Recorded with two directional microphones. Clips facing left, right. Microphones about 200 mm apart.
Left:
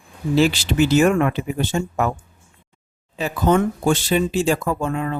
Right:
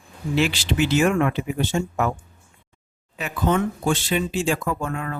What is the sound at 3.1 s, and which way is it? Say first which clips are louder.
Speech: left 4 dB; 35° left (ahead or behind).